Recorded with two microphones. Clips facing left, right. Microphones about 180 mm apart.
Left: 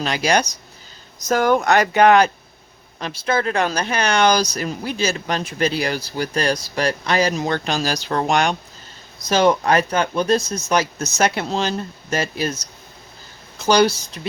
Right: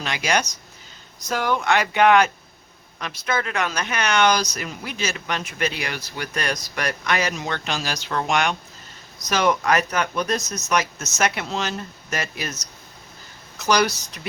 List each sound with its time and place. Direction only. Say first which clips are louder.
0.0 s speech: left 5 dB; 35° left (ahead or behind)
1.3 s speech: left 5 dB; 45° left (ahead or behind); by 14.2 s 30° left (ahead or behind)